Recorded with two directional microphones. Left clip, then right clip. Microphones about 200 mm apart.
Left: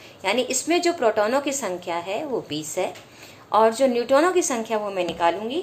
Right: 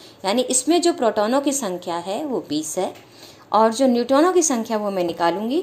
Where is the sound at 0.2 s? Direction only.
35° right (ahead or behind).